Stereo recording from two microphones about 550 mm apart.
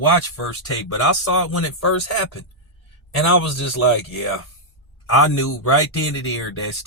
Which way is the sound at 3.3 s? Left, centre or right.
Left.